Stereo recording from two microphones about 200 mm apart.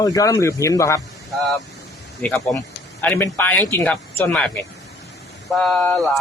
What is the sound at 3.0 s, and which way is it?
Speech, 10° left (ahead or behind).